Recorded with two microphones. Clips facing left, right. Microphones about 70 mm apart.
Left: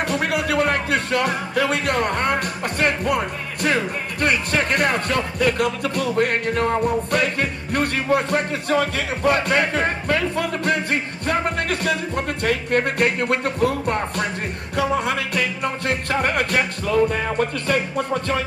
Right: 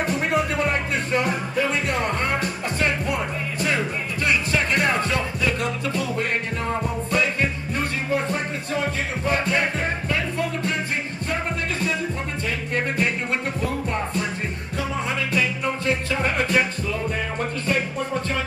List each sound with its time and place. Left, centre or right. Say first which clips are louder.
0.0 s music: left 1 dB; left
3.6 s speech: left 4 dB; left
12.4 s music: left 6 dB; left